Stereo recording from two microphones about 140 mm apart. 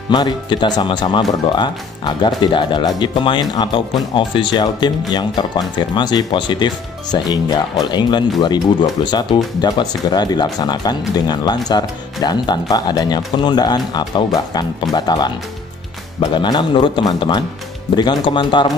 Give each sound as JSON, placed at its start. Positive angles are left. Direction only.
{"t": 0.1, "sound": "speech", "side_deg": 35}
{"t": 16.3, "sound": "speech", "side_deg": 35}